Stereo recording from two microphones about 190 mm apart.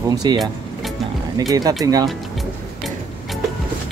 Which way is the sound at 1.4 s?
20° right (ahead or behind).